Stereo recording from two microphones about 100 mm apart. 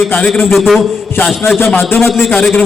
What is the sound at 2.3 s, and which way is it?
Speech, 10° left (ahead or behind).